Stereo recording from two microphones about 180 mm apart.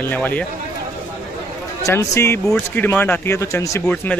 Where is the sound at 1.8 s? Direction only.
15° left (ahead or behind).